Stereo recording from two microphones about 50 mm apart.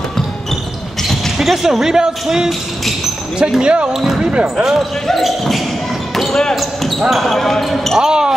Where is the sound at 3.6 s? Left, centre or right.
Right.